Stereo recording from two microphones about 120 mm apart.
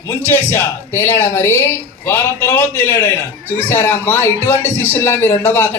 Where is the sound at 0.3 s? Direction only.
20° left (ahead or behind).